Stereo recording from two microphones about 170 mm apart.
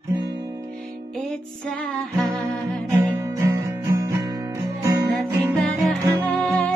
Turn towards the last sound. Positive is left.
turn(degrees=10)  # may be behind; listen again after turning